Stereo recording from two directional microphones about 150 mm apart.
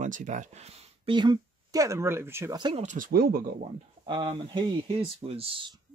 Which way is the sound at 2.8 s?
55° right (ahead or behind).